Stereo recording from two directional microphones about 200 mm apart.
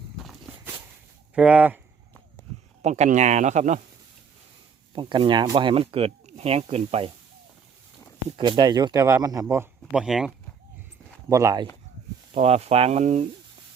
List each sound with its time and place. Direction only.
0.3 s walk: 5° right (ahead or behind)
1.4 s speech: 5° right (ahead or behind)
2.8 s speech: 35° right (ahead or behind)
4.9 s speech: 25° right (ahead or behind)
8.4 s speech: 20° right (ahead or behind); by 10.3 s 5° right (ahead or behind)
11.3 s speech: 15° right (ahead or behind)
12.3 s speech: 30° right (ahead or behind)